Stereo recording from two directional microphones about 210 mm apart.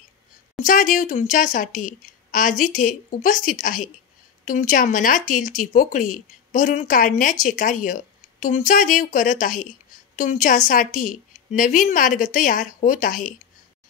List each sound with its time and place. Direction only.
0.6 s a woman's voice: 40° left (ahead or behind)